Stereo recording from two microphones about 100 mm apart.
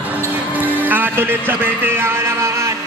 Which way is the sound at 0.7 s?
20° right (ahead or behind).